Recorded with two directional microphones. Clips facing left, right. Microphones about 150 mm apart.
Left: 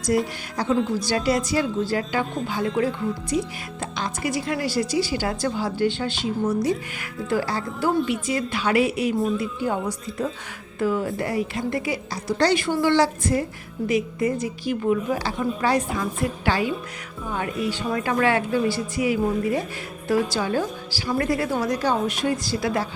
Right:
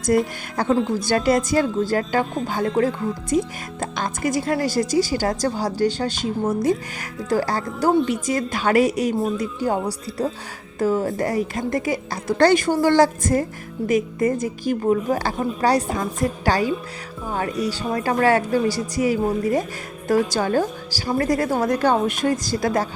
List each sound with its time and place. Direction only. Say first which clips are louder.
0.1 s a woman's voice: right 4 dB; 50° right (ahead or behind)